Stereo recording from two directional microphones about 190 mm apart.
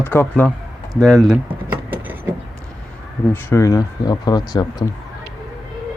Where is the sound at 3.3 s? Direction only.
15° left (ahead or behind).